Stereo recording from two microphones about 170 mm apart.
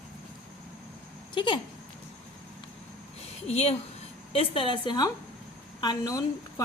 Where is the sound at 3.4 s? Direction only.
35° left (ahead or behind).